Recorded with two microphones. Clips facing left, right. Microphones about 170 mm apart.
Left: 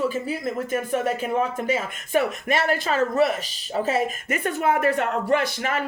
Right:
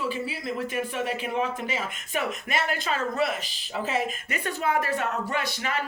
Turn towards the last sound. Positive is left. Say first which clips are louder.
# left 6 dB
turn(degrees=50)  # may be behind; listen again after turning